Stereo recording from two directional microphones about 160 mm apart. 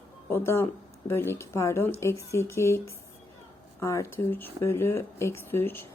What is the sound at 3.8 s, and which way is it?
A woman's voice, 20° left (ahead or behind).